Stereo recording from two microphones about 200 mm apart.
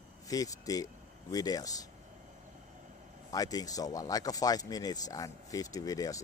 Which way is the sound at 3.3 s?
20° left (ahead or behind).